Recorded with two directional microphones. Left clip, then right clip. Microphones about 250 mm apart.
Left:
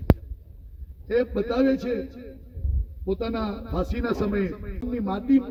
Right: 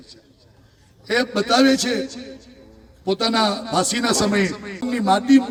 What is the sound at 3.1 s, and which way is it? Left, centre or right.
A man's voice, right.